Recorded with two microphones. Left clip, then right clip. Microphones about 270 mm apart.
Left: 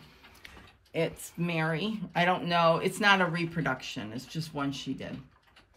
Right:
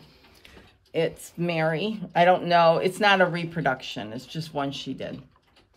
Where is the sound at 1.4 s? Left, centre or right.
Right.